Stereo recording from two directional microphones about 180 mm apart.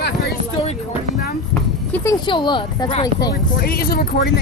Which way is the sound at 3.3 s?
55° left (ahead or behind).